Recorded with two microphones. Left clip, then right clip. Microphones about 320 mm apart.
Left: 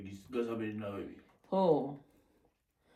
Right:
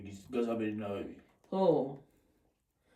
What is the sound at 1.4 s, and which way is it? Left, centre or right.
Speech, centre.